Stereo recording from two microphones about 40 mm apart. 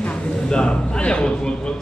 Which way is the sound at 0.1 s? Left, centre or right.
Left.